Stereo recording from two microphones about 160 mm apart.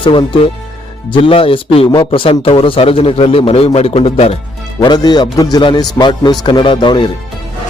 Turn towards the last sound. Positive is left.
turn(degrees=30)  # may be behind; listen again after turning